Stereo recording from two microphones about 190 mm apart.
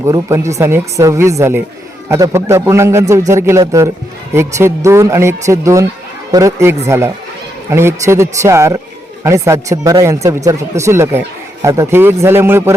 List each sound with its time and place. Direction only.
0.0 s speech: 15° right (ahead or behind)